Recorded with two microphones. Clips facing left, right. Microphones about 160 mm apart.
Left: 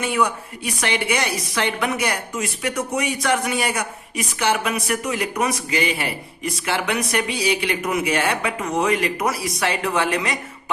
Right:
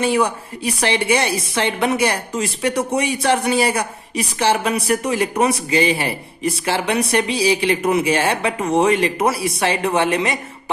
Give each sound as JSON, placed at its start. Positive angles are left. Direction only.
{"t": 0.0, "sound": "a woman's voice", "side_deg": -30}